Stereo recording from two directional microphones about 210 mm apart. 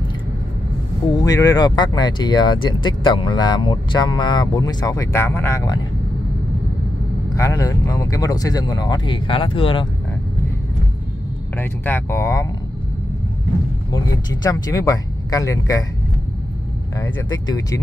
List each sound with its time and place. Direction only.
1.1 s speech: 15° left (ahead or behind)
7.3 s speech: 15° left (ahead or behind)
11.5 s speech: 10° left (ahead or behind)
13.9 s speech: 15° left (ahead or behind)
16.9 s speech: 15° left (ahead or behind)